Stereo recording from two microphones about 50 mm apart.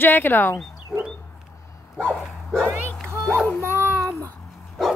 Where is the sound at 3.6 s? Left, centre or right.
Right.